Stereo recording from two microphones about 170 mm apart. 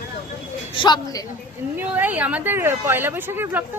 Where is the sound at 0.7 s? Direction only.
25° left (ahead or behind).